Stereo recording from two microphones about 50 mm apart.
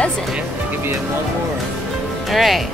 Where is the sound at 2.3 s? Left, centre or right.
Centre.